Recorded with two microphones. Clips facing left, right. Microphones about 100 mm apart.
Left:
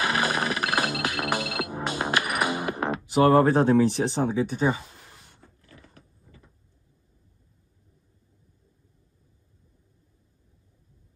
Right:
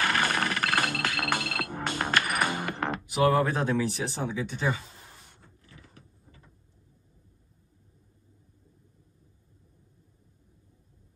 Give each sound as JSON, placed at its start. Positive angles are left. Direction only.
{"t": 0.0, "sound": "music", "side_deg": 10}
{"t": 3.1, "sound": "speech", "side_deg": 40}